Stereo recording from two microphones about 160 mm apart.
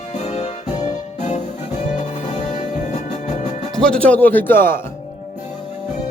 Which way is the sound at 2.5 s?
50° left (ahead or behind).